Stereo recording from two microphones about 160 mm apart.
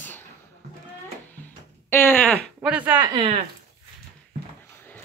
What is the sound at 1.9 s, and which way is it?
Speech, 15° left (ahead or behind).